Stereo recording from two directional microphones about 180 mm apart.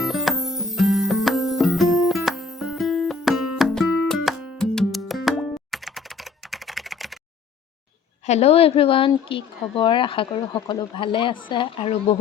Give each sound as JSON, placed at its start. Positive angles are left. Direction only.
{"t": 0.0, "sound": "music", "side_deg": 0}
{"t": 8.3, "sound": "speech", "side_deg": 35}